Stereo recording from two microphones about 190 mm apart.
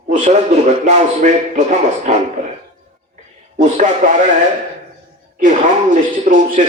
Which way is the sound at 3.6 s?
40° right (ahead or behind).